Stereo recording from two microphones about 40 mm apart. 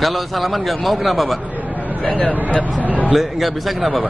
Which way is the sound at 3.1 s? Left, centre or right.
Centre.